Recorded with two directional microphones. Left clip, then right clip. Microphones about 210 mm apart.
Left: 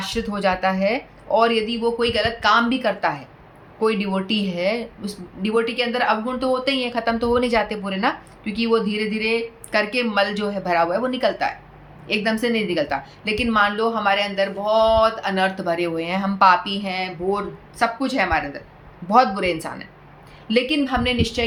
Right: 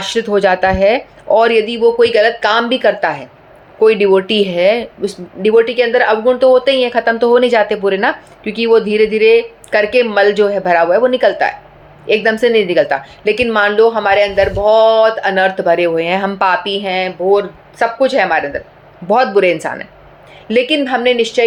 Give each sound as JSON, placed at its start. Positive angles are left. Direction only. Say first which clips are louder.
{"t": 0.0, "sound": "a woman's voice", "louder": "right 10 dB", "side_deg": -50}